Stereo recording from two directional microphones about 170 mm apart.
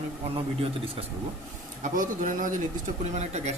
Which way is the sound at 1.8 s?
50° right (ahead or behind).